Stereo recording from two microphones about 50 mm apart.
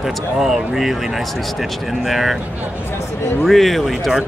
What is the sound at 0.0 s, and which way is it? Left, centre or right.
Speech, centre.